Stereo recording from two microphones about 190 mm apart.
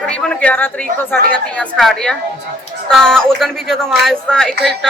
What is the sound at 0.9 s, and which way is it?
Speech, 50° right (ahead or behind).